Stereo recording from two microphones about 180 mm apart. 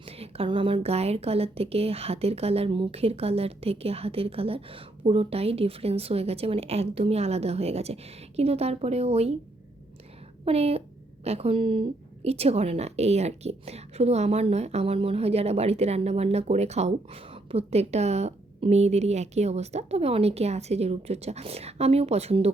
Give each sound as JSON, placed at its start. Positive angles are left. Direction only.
{"t": 0.0, "sound": "a woman's voice", "side_deg": -30}
{"t": 10.4, "sound": "a woman's voice", "side_deg": -35}